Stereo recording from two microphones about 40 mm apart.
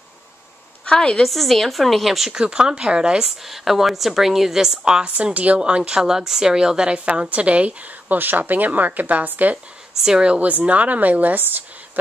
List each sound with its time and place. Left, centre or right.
0.8 s a woman's voice: left
1.2 s a woman's voice: centre
2.3 s speech: right
3.3 s a woman's voice: centre
5.0 s a woman's voice: right
5.6 s a woman's voice: right
7.2 s a woman's voice: right
8.2 s speech: right
10.0 s speech: right
10.4 s a woman's voice: right